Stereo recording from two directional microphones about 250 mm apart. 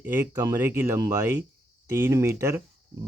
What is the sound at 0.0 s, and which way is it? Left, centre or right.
Speech, centre.